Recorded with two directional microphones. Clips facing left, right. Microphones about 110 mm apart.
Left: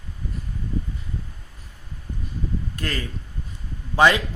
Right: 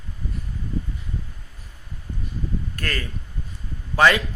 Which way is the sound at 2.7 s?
15° left (ahead or behind).